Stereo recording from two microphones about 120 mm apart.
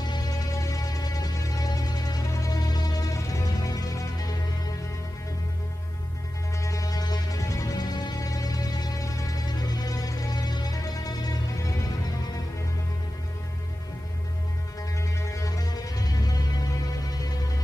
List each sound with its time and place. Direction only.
0.0 s music: 35° left (ahead or behind)
6.6 s music: 30° left (ahead or behind)
14.8 s music: 25° left (ahead or behind)